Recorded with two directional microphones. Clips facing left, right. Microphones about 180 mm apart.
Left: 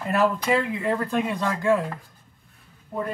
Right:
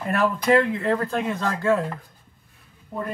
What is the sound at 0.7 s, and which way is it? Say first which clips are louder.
Speech: right 1 dB; 10° left (ahead or behind).